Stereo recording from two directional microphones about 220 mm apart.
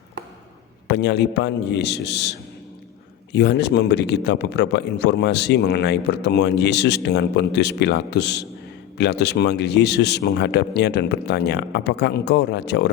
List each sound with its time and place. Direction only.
0.9 s a man's voice: 50° left (ahead or behind)